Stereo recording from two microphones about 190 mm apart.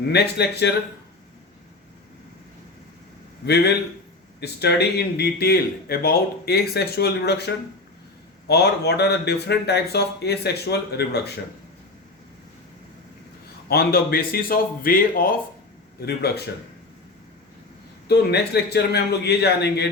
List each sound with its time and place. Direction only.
0.1 s speech: 60° left (ahead or behind)
3.4 s speech: 60° left (ahead or behind)
13.7 s a man's voice: 55° left (ahead or behind)
18.1 s speech: 60° left (ahead or behind)